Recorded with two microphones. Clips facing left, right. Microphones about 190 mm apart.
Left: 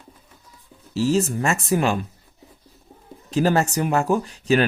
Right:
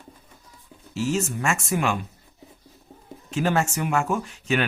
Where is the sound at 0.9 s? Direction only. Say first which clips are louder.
Left 5 dB; 35° left (ahead or behind).